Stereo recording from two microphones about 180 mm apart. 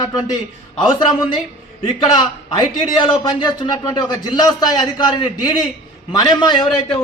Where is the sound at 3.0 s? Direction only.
25° left (ahead or behind).